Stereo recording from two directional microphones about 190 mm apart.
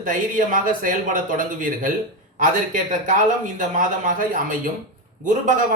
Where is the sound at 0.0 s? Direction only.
45° right (ahead or behind).